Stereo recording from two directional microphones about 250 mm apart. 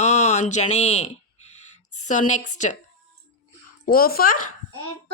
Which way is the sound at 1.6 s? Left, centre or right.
Left.